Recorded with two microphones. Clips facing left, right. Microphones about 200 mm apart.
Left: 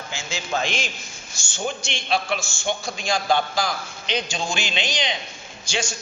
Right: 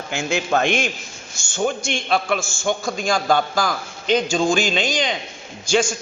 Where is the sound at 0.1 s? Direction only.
60° right (ahead or behind).